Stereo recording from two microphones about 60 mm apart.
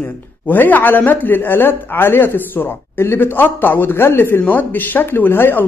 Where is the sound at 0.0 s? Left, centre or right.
Left.